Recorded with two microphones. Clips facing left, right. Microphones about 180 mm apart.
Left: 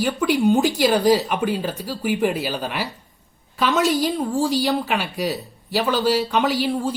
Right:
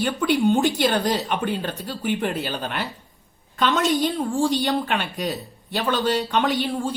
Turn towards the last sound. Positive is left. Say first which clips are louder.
# left 2 dB
turn(degrees=5)  # may be behind; listen again after turning